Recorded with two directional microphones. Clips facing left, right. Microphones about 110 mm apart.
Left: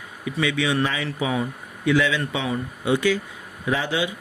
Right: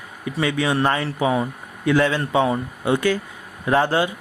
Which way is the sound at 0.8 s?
55° right (ahead or behind).